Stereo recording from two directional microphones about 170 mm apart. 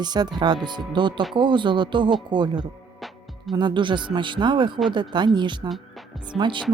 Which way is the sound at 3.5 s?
25° right (ahead or behind).